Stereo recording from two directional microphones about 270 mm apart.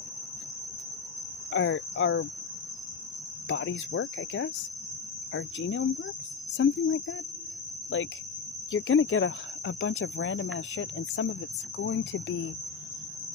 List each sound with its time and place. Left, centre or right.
1.5 s speech: left
3.4 s speech: left